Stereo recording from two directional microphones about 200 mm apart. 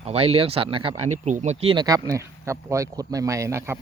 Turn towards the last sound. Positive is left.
turn(degrees=-15)  # may be behind; listen again after turning